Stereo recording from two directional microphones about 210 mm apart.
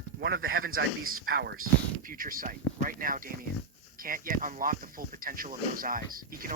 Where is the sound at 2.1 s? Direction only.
40° right (ahead or behind).